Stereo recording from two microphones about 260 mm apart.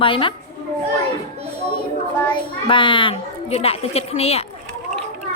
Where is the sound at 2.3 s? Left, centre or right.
Centre.